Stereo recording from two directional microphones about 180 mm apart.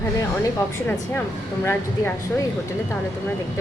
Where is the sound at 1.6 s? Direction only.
15° left (ahead or behind).